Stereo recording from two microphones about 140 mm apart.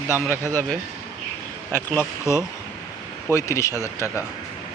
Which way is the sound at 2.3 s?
20° left (ahead or behind).